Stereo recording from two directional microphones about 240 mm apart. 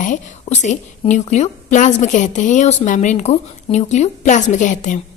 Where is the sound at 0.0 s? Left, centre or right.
Left.